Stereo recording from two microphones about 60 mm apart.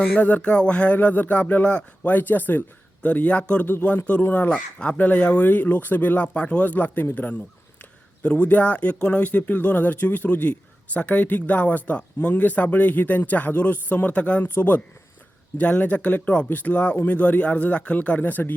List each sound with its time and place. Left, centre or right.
0.0 s speech: centre
3.7 s speech: left
6.2 s speech: centre
14.4 s speech: left